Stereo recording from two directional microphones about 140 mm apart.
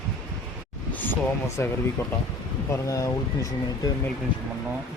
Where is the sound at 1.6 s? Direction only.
15° left (ahead or behind).